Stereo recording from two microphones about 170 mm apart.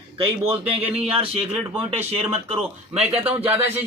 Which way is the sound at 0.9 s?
5° right (ahead or behind).